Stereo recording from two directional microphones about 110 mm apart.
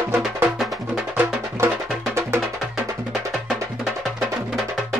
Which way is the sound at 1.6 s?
25° right (ahead or behind).